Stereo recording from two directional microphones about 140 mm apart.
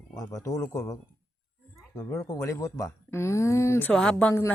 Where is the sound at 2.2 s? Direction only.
25° left (ahead or behind).